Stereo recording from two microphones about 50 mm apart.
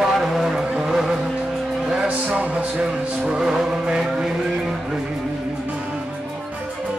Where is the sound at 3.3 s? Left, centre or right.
Centre.